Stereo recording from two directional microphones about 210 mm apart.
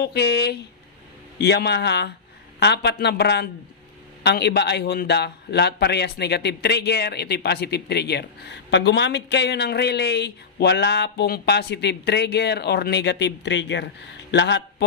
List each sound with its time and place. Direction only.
0.0 s a man's voice: 50° left (ahead or behind)